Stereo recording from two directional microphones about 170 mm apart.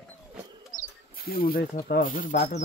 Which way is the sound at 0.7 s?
60° left (ahead or behind).